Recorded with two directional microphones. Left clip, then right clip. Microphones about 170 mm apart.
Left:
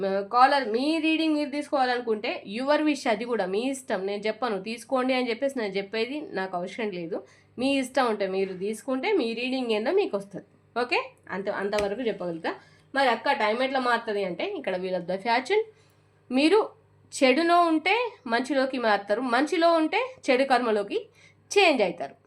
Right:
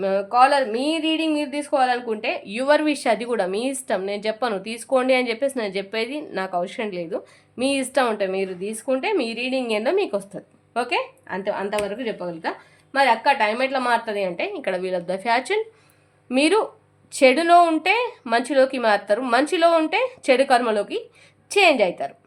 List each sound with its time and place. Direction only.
0.0 s speech: 20° right (ahead or behind)